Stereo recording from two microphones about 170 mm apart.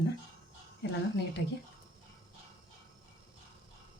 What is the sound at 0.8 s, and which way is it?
Speech, 90° left.